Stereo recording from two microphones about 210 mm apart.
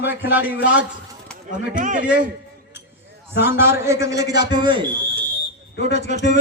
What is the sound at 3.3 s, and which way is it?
A man's voice, 10° right (ahead or behind).